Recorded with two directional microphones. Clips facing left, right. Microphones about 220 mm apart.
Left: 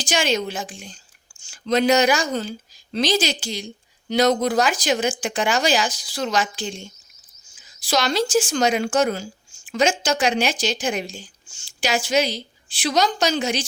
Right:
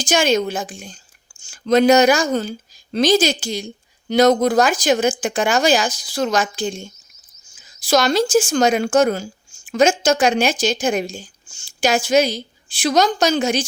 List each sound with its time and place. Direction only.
0.0 s speech: 45° right (ahead or behind)